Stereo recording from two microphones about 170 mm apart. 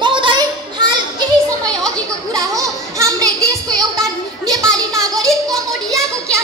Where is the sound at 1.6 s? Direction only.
5° left (ahead or behind).